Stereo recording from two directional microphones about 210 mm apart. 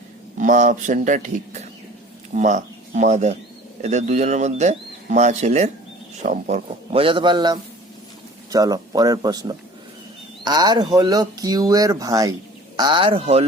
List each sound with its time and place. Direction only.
0.3 s a man's voice: 35° right (ahead or behind)